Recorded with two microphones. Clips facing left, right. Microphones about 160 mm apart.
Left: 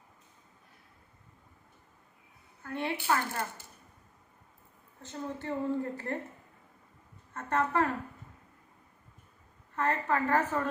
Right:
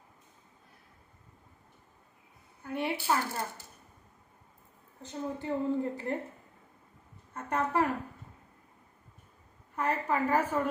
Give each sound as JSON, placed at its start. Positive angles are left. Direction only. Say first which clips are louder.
{"t": 2.6, "sound": "a woman's voice", "louder": "even", "side_deg": -15}
{"t": 5.0, "sound": "a woman's voice", "louder": "right 2 dB", "side_deg": -15}
{"t": 7.3, "sound": "a woman's voice", "louder": "even", "side_deg": -10}
{"t": 9.7, "sound": "a woman's voice", "louder": "even", "side_deg": -10}